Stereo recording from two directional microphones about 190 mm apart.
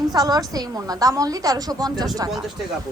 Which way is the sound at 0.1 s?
20° right (ahead or behind).